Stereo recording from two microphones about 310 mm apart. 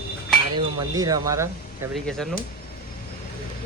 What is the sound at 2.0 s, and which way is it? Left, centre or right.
Speech, centre.